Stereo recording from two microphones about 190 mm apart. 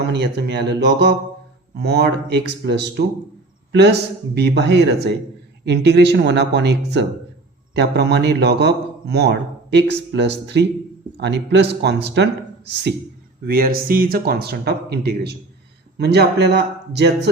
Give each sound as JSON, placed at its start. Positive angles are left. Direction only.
{"t": 0.0, "sound": "a man's voice", "side_deg": -60}
{"t": 13.4, "sound": "a man's voice", "side_deg": -50}